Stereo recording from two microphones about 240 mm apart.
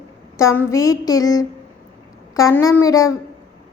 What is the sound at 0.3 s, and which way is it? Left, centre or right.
A woman's voice, centre.